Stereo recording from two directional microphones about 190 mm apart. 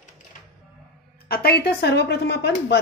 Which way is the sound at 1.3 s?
55° left (ahead or behind).